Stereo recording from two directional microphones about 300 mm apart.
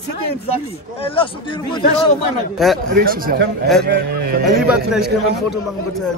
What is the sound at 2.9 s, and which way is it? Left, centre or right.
A man's voice, right.